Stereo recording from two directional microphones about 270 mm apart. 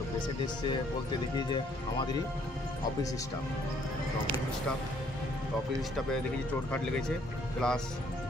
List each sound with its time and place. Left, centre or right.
1.5 s speech: centre
7.6 s speech: centre